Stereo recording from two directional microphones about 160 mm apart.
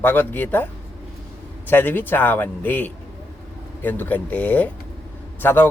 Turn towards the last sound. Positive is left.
turn(degrees=10)  # may be behind; listen again after turning